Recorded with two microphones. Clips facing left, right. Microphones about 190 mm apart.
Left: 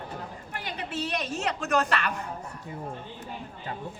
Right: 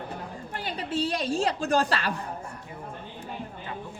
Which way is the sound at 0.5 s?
30° right (ahead or behind).